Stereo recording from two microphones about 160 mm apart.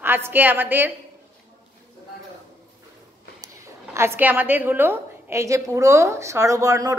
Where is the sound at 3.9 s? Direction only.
15° right (ahead or behind).